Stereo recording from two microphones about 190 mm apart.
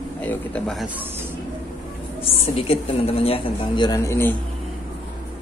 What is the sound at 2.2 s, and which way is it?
A woman's voice, 30° left (ahead or behind).